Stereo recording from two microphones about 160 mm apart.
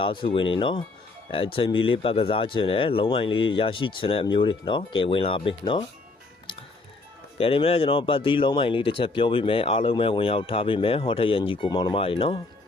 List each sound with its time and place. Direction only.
0.0 s speech: 30° left (ahead or behind)
7.3 s speech: 35° left (ahead or behind)